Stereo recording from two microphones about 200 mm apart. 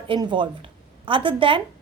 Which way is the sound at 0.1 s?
25° right (ahead or behind).